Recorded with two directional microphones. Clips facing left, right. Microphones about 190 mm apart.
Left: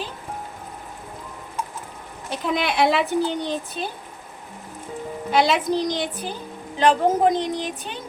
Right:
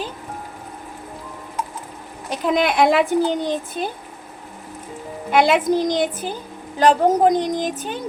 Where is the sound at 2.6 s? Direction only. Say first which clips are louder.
Right 4 dB; 50° right (ahead or behind).